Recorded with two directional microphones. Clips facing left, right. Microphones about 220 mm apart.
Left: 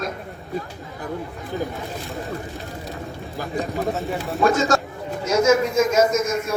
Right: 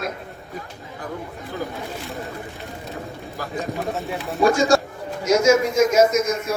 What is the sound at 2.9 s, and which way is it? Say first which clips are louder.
Vehicle: even; 15° left (ahead or behind).